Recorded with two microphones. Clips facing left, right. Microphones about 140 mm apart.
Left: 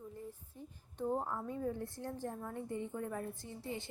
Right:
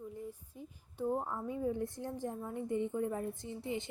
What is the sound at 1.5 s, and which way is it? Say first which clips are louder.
A woman's voice: right 4 dB; 15° right (ahead or behind).